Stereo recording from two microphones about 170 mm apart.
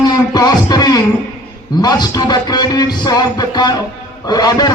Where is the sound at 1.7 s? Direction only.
25° left (ahead or behind).